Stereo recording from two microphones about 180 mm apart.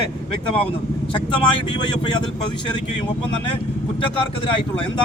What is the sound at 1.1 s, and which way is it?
Speech, 25° left (ahead or behind).